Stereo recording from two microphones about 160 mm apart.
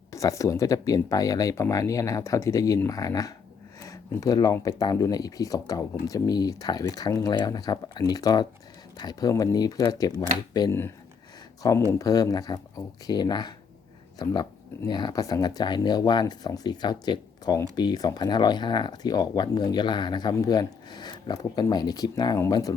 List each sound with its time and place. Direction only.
0.1 s speech: 20° left (ahead or behind)